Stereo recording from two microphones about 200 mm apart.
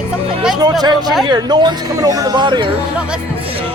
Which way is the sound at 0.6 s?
20° right (ahead or behind).